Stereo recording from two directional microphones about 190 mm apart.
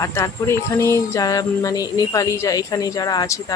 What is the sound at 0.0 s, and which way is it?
Speech, 15° left (ahead or behind).